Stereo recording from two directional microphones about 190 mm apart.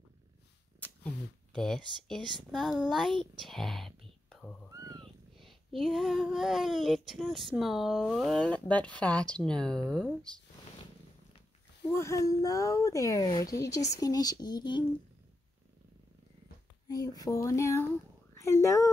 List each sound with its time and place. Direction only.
0.7 s a sound: 10° left (ahead or behind)
2.5 s a child's voice: centre (ahead or behind)
5.0 s child singing: centre (ahead or behind)
11.9 s speech: 15° left (ahead or behind)
16.8 s speech: 20° left (ahead or behind)